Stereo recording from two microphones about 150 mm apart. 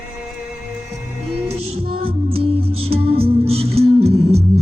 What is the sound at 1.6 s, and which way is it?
Music, 40° right (ahead or behind).